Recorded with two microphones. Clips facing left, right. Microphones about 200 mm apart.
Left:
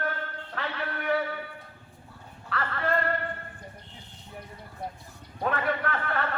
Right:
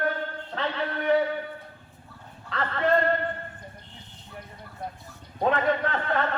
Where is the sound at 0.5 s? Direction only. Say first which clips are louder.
Right 4 dB; 25° right (ahead or behind).